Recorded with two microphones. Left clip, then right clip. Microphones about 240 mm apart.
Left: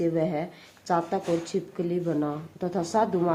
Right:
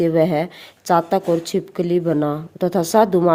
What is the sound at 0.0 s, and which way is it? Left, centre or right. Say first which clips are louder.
A woman's voice: right 10 dB; right.